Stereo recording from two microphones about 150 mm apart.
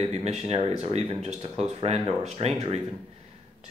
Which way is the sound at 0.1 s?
45° right (ahead or behind).